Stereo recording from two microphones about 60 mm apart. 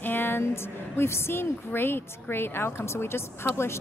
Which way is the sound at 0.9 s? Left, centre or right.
Left.